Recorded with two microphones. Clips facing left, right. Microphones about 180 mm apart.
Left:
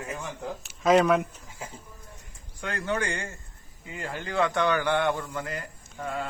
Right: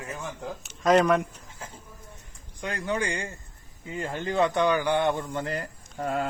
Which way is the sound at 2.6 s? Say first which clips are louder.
Even; 15° right (ahead or behind).